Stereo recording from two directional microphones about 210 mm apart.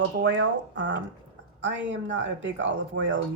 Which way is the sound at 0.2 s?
60° right (ahead or behind).